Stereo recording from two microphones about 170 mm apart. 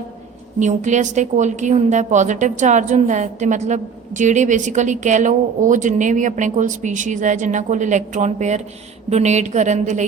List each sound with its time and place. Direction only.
0.6 s a woman's voice: 45° right (ahead or behind)